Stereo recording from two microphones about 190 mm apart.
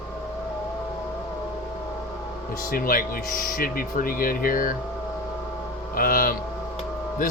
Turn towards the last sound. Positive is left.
turn(degrees=45)  # may be behind; listen again after turning